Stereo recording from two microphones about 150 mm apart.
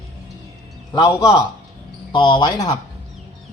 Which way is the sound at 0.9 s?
20° left (ahead or behind).